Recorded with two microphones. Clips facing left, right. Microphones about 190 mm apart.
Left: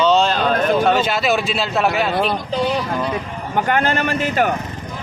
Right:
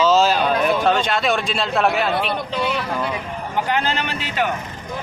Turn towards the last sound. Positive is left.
turn(degrees=45)  # may be behind; listen again after turning